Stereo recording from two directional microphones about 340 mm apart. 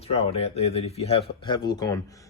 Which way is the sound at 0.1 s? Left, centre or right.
Centre.